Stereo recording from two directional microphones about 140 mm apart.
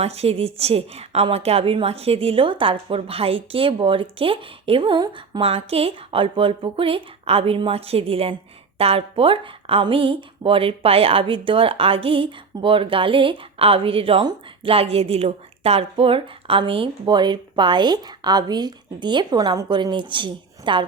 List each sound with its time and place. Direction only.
0.0 s a woman's voice: 50° right (ahead or behind)